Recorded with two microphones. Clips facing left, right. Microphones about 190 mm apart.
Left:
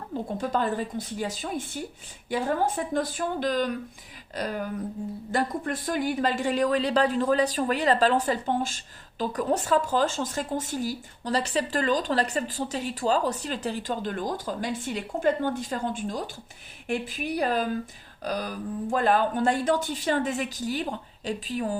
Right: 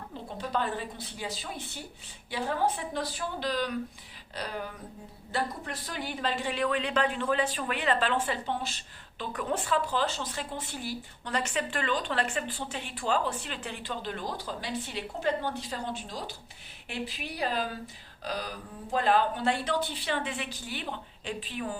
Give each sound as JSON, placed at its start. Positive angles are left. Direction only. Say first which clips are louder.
{"t": 0.3, "sound": "a woman's voice", "louder": "left 4 dB", "side_deg": 45}
{"t": 18.2, "sound": "a sound", "louder": "left 5 dB", "side_deg": 45}
{"t": 18.9, "sound": "a woman's voice", "louder": "left 2 dB", "side_deg": 45}